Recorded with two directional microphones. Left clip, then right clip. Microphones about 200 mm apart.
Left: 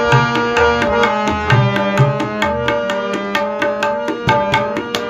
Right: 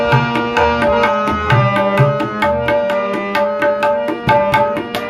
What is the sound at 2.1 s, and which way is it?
Music, 25° left (ahead or behind).